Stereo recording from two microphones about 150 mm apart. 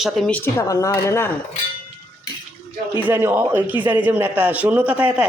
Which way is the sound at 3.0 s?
15° right (ahead or behind).